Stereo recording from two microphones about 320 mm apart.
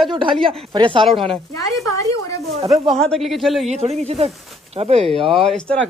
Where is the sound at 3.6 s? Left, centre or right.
Centre.